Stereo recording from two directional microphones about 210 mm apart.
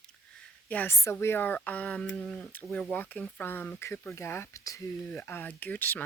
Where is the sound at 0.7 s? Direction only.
10° left (ahead or behind).